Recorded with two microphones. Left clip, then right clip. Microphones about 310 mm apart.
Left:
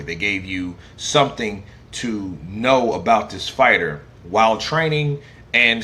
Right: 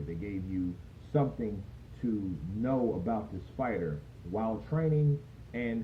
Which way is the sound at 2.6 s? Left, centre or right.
Left.